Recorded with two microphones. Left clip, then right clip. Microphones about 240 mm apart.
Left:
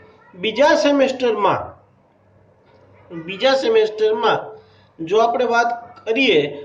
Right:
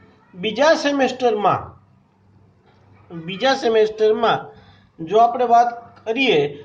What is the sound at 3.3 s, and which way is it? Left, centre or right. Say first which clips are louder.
A man's voice: left 2 dB; right.